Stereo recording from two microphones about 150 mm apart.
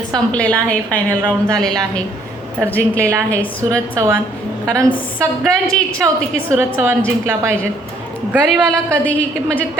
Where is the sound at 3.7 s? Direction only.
20° right (ahead or behind).